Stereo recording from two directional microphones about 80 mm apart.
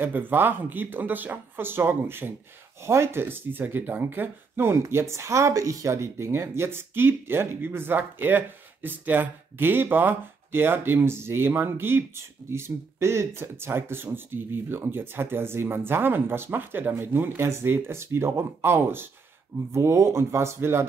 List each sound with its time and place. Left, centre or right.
0.0 s speech: right